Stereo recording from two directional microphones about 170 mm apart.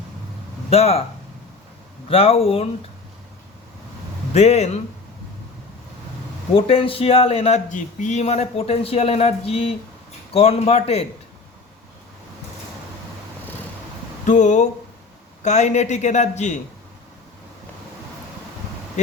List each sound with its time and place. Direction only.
0.7 s speech: 35° left (ahead or behind)
2.0 s speech: 35° left (ahead or behind)
4.4 s speech: 40° left (ahead or behind)
6.5 s speech: 30° left (ahead or behind)
14.3 s speech: 45° left (ahead or behind)